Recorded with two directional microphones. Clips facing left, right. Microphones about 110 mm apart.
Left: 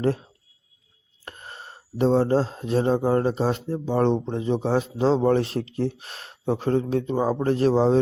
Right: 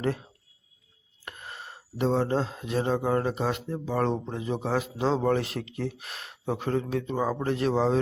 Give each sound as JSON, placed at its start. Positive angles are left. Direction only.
{"t": 1.2, "sound": "speech", "side_deg": 35}